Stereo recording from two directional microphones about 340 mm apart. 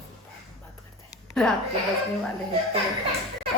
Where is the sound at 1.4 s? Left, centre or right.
Centre.